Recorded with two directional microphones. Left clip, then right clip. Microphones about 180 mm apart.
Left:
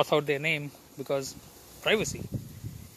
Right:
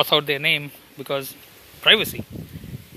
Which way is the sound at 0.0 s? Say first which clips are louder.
Right 7 dB; 10° left (ahead or behind).